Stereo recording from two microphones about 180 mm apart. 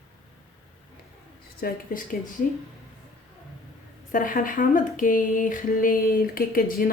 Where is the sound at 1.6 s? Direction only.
55° left (ahead or behind).